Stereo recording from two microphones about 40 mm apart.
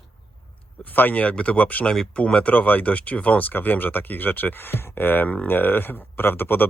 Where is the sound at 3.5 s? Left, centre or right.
Left.